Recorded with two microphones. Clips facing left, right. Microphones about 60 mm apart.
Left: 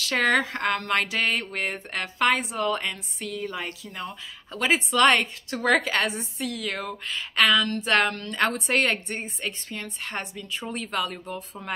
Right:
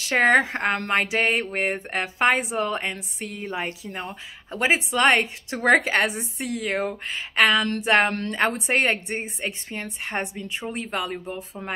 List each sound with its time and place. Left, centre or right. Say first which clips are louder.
0.0 s speech: right 4 dB; right
8.1 s a woman's voice: right 5 dB; right
8.4 s speech: even; centre